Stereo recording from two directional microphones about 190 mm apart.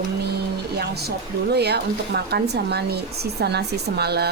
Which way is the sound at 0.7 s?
60° right (ahead or behind).